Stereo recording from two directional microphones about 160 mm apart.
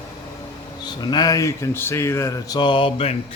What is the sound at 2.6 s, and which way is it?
Mantra, 30° left (ahead or behind).